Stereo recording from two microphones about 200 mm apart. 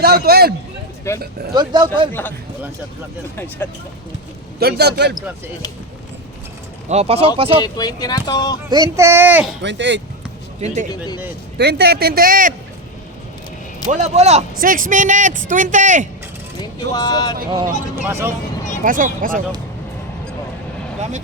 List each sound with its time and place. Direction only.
0.0 s a man's voice: 50° right (ahead or behind)
1.1 s speech: 15° left (ahead or behind)
1.5 s speech: 20° right (ahead or behind)
3.3 s speech: 10° left (ahead or behind)
4.6 s a man's voice: 55° right (ahead or behind)
6.8 s speech: 30° right (ahead or behind)
7.6 s speech: 20° left (ahead or behind)
8.7 s speech: 15° right (ahead or behind)
9.6 s a man's voice: 60° right (ahead or behind)
11.5 s a man's voice: 55° right (ahead or behind)
13.8 s speech: 35° right (ahead or behind)
16.6 s speech: 20° left (ahead or behind)
17.9 s speech: 15° right (ahead or behind)
18.9 s a man's voice: 45° right (ahead or behind)